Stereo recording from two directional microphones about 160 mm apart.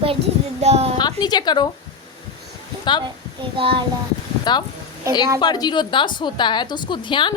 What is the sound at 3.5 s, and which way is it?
Speech, 35° right (ahead or behind).